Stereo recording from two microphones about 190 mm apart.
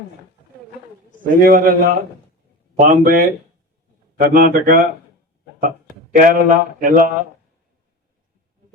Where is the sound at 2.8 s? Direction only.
50° right (ahead or behind).